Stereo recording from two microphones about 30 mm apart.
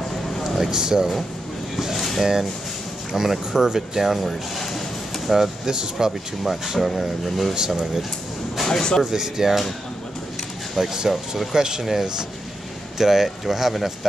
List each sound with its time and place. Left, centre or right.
0.6 s speech: right
2.0 s a sound: centre
3.1 s speech: centre
4.2 s a sound: centre
5.3 s speech: centre
6.4 s speech: centre
7.5 s speech: right
8.6 s speech: centre
9.0 s speech: centre
10.8 s speech: centre
11.5 s speech: right; by 13.9 s centre